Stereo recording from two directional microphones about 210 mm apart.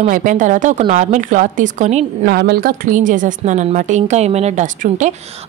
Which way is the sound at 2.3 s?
50° right (ahead or behind).